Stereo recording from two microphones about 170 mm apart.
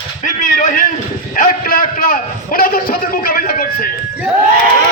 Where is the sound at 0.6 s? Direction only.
50° left (ahead or behind).